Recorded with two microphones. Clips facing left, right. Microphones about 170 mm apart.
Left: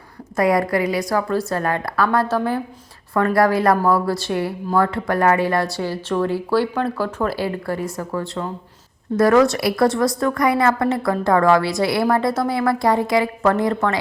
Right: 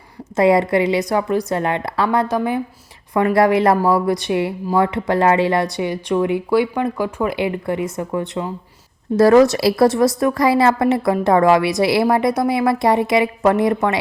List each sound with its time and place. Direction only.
0.3 s a woman's voice: 25° right (ahead or behind)
9.1 s a woman's voice: 30° right (ahead or behind)